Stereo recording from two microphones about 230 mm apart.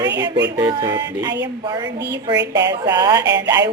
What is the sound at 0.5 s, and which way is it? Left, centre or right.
Speech, centre.